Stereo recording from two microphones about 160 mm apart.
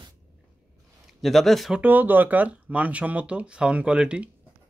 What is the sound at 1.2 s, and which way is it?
Speech, centre (ahead or behind).